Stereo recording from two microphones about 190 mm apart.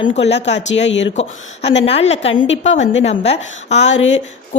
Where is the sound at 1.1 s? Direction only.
35° left (ahead or behind).